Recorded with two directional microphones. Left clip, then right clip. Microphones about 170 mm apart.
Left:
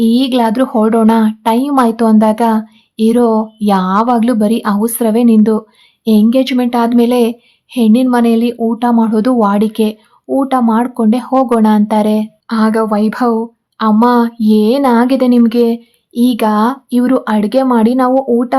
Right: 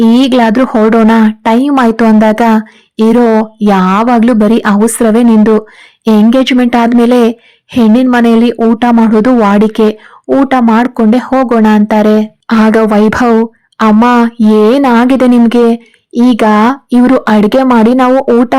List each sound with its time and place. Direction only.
0.0 s speech: 25° right (ahead or behind)